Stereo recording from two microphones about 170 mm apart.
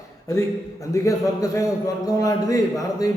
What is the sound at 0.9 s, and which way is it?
A man's voice, 20° left (ahead or behind).